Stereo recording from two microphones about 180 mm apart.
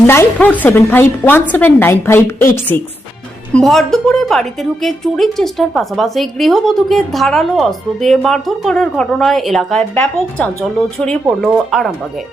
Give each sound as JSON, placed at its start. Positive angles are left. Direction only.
{"t": 0.1, "sound": "a woman's voice", "side_deg": 10}
{"t": 3.5, "sound": "a woman's voice", "side_deg": 0}